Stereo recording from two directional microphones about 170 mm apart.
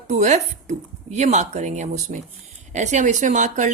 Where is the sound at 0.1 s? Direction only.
45° right (ahead or behind).